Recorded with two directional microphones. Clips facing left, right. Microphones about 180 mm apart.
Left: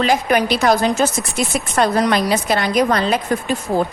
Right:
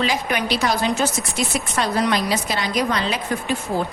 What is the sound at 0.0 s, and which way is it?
A woman's voice, 50° left (ahead or behind).